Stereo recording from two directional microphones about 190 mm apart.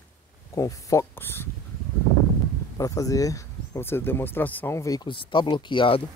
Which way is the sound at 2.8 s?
15° left (ahead or behind).